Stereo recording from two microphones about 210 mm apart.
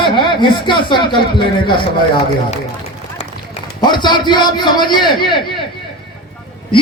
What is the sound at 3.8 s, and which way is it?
A man's voice, 20° left (ahead or behind).